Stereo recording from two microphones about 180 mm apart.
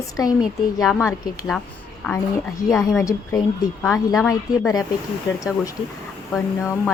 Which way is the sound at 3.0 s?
15° left (ahead or behind).